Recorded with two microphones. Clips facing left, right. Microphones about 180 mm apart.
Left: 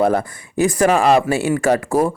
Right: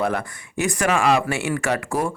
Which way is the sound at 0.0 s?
35° left (ahead or behind).